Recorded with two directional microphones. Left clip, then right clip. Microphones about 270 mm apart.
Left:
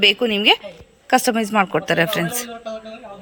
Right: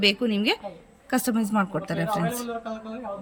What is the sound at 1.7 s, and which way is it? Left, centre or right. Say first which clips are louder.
Speech: left 9 dB; centre.